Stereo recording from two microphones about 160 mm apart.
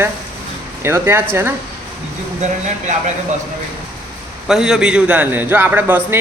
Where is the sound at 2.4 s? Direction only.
45° right (ahead or behind).